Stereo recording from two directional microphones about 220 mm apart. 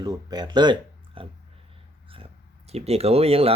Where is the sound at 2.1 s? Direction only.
25° right (ahead or behind).